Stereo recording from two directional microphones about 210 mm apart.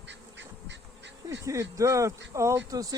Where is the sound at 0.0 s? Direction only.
60° right (ahead or behind).